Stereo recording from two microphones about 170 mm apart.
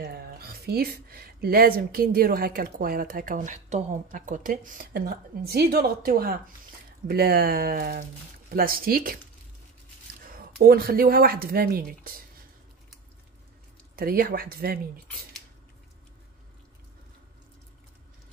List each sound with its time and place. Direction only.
0.0 s speech: 65° right (ahead or behind)
10.2 s speech: 60° right (ahead or behind)
13.9 s speech: 60° right (ahead or behind)